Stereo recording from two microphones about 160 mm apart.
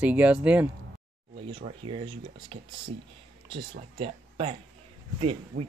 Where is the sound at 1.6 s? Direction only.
35° right (ahead or behind).